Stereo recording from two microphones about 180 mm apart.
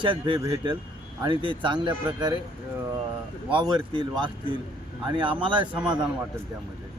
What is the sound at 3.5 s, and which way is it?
Speech, 25° right (ahead or behind).